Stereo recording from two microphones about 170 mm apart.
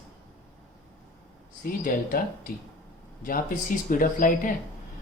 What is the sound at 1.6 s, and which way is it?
Speech, 60° left (ahead or behind).